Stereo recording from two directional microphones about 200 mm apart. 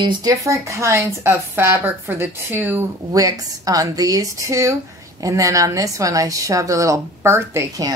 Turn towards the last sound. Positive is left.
turn(degrees=-15)  # may be behind; listen again after turning